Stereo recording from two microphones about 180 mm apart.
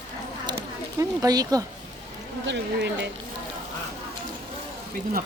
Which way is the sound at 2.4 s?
80° right.